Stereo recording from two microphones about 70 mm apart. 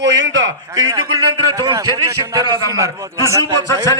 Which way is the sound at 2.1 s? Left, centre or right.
Right.